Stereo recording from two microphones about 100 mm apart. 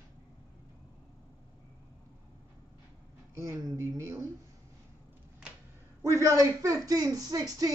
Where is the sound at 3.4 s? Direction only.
30° right (ahead or behind).